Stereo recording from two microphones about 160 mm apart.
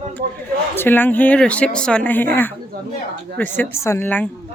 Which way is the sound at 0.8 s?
10° left (ahead or behind).